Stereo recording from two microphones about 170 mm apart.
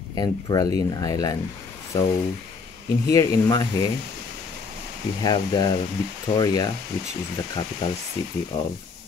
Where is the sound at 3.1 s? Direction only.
20° left (ahead or behind).